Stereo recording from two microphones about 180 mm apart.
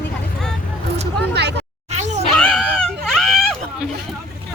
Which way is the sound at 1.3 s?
70° right (ahead or behind).